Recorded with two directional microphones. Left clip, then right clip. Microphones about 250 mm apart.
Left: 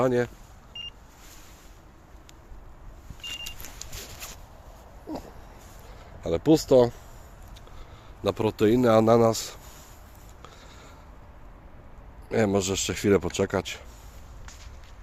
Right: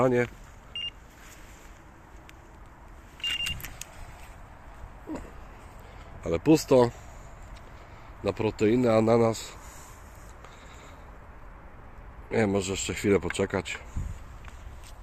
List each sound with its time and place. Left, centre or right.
0.0 s speech: centre
0.7 s beep: left
6.2 s speech: centre
8.2 s speech: centre
12.3 s speech: centre